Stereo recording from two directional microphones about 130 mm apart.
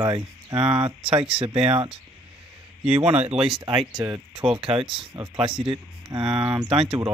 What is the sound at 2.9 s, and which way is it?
Speech, 55° right (ahead or behind).